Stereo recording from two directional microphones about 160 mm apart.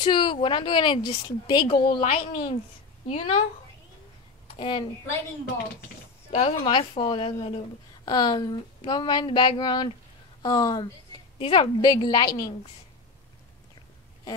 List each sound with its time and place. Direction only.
0.0 s a woman's voice: 30° left (ahead or behind)
4.6 s a woman's voice: 30° left (ahead or behind)
6.3 s a woman's voice: 35° left (ahead or behind)